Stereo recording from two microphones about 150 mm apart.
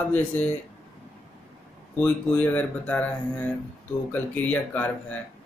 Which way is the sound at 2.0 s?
10° left (ahead or behind).